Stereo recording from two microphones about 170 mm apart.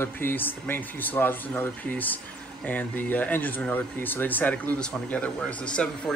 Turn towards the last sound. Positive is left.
turn(degrees=5)  # may be behind; listen again after turning